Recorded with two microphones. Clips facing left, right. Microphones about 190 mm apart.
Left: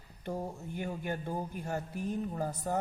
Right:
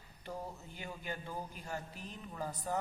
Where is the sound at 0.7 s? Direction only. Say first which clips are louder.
Left 10 dB; 50° left (ahead or behind).